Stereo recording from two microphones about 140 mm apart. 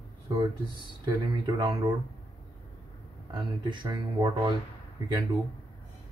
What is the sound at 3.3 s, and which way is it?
Speech, 35° right (ahead or behind).